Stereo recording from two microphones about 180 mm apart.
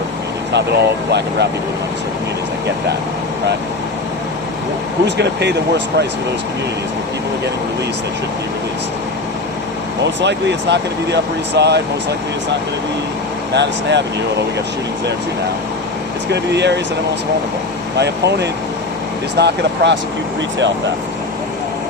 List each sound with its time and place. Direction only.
0.5 s speech: 70° right (ahead or behind)
5.0 s speech: 70° right (ahead or behind)
10.0 s speech: 75° right (ahead or behind)
13.5 s speech: 75° right (ahead or behind)
16.3 s speech: 70° right (ahead or behind)
17.9 s speech: 70° right (ahead or behind)